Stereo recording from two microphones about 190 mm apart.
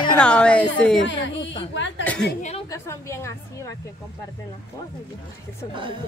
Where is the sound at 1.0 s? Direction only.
75° left (ahead or behind).